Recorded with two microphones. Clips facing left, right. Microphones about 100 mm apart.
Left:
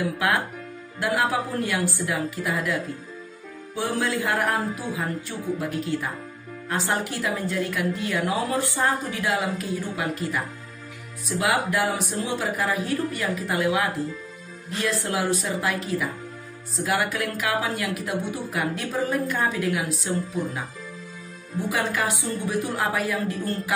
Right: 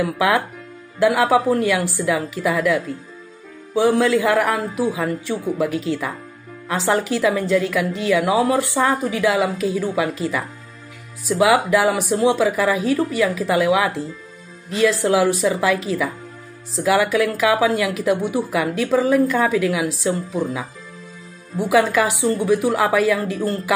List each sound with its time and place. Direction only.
0.9 s speech: 90° right
21.5 s speech: 90° right